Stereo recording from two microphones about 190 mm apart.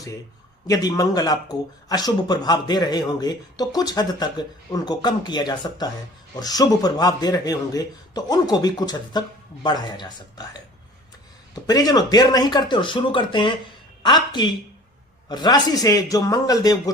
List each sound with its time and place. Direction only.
0.7 s speech: 20° left (ahead or behind)